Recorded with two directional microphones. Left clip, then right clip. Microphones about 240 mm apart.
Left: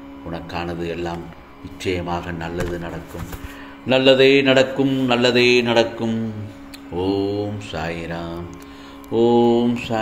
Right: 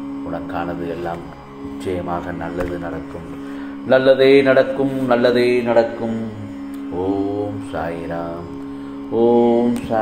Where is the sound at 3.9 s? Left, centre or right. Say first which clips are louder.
Right 2 dB; left.